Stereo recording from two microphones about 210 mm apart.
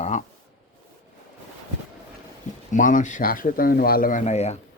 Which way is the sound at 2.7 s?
40° left (ahead or behind).